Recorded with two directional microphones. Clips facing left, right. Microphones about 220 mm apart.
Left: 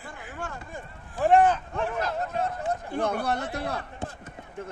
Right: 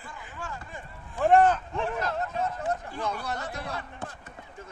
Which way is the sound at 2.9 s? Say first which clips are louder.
Left 6 dB; 55° left (ahead or behind).